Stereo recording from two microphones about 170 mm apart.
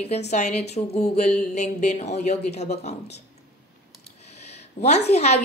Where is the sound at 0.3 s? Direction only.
40° left (ahead or behind).